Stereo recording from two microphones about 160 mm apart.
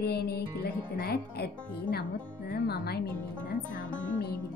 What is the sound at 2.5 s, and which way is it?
Speech, 85° left.